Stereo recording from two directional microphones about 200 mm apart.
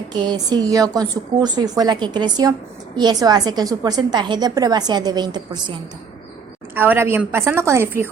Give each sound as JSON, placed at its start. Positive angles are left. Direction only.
{"t": 0.1, "sound": "a woman's voice", "side_deg": -20}
{"t": 6.7, "sound": "a woman's voice", "side_deg": -10}